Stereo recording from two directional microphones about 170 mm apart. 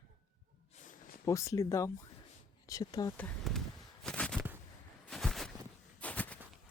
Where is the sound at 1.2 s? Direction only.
20° left (ahead or behind).